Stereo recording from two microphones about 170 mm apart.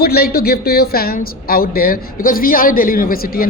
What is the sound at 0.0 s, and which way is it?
A woman's voice, 65° left (ahead or behind).